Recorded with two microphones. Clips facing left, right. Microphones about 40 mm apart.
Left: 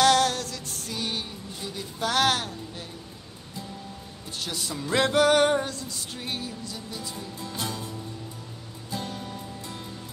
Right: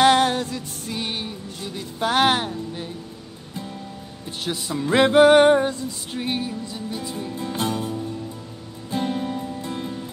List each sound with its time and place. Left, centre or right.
0.0 s music: right
4.6 s music: right